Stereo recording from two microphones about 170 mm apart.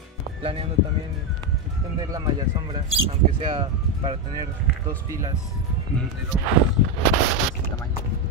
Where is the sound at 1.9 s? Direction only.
25° right (ahead or behind).